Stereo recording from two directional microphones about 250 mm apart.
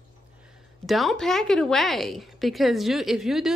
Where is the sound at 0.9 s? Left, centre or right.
Centre.